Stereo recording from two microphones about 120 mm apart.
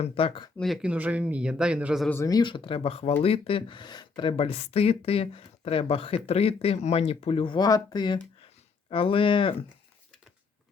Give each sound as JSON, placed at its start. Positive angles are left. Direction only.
{"t": 0.0, "sound": "speech", "side_deg": 50}
{"t": 0.6, "sound": "speech", "side_deg": -5}
{"t": 2.2, "sound": "speech", "side_deg": 35}